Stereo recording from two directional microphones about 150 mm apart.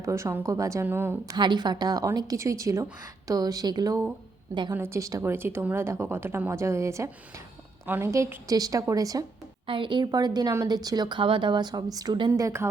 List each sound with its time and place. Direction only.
0.0 s speech: 20° right (ahead or behind)
1.3 s speech: 30° right (ahead or behind)
9.6 s speech: 35° right (ahead or behind); by 12.6 s 20° right (ahead or behind)